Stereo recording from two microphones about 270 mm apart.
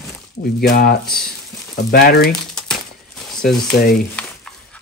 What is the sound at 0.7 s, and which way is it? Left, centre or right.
Speech, left.